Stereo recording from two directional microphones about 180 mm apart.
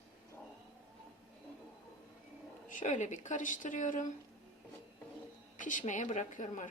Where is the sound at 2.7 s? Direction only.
45° left (ahead or behind).